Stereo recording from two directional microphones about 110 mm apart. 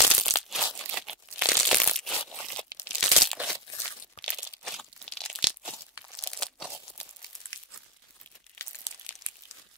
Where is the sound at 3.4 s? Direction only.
15° right (ahead or behind).